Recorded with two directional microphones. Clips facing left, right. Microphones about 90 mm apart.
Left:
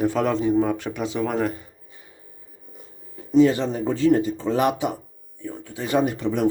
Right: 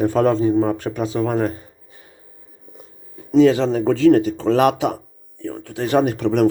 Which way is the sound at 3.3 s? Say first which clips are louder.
Right 4 dB; 90° right.